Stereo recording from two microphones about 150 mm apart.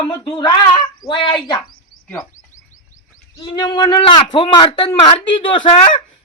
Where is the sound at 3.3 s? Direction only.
30° left (ahead or behind).